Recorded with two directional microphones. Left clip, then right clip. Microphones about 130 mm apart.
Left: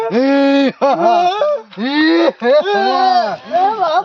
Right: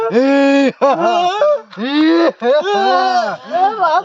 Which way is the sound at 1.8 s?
15° right (ahead or behind).